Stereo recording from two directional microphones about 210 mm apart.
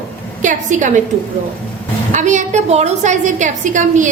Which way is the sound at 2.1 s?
35° right (ahead or behind).